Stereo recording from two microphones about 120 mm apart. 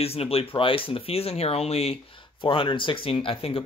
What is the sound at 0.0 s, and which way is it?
Speech, 55° left (ahead or behind).